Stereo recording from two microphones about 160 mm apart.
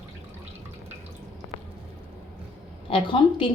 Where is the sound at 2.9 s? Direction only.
35° left (ahead or behind).